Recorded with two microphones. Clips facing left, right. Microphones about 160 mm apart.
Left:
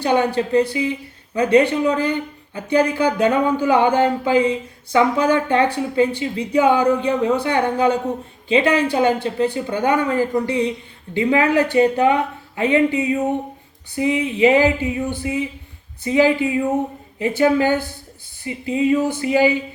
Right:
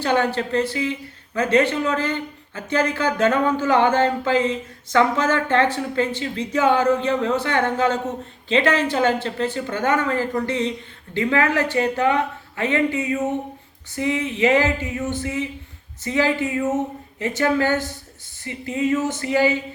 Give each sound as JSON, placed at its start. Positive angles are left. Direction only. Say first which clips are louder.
{"t": 0.0, "sound": "speech", "louder": "left 3 dB", "side_deg": 15}